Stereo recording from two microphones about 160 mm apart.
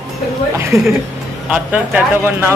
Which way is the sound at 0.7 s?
15° right (ahead or behind).